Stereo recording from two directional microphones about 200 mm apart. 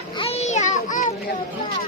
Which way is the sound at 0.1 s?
30° left (ahead or behind).